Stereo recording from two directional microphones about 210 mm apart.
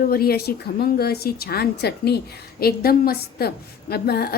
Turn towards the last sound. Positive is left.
turn(degrees=50)  # may be behind; listen again after turning